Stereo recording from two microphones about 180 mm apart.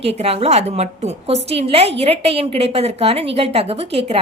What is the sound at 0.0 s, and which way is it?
A woman's voice, 35° right (ahead or behind).